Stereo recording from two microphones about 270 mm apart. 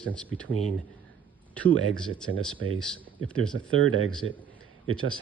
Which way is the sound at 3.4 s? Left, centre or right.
Right.